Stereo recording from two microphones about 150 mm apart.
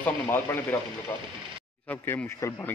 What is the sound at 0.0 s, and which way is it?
Speech, 15° left (ahead or behind).